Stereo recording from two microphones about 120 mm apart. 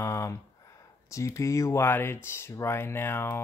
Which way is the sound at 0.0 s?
25° left (ahead or behind).